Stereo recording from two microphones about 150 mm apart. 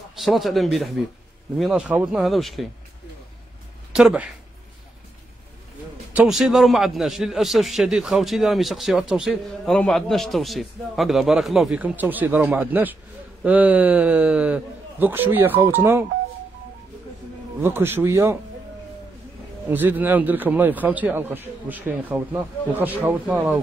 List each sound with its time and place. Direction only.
0.2 s a man's voice: centre (ahead or behind)
3.9 s speech: 5° right (ahead or behind)
6.1 s a man's voice: centre (ahead or behind)
17.6 s a man's voice: 15° right (ahead or behind)
19.7 s a man's voice: 10° right (ahead or behind)